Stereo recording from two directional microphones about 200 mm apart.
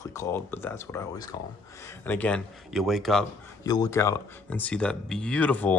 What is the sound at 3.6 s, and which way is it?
Speech, 20° left (ahead or behind).